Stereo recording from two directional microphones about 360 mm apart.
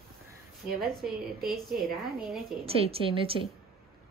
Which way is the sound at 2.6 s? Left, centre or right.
Centre.